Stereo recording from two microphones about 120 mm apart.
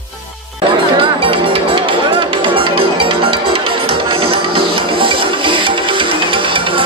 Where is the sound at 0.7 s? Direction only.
45° right (ahead or behind).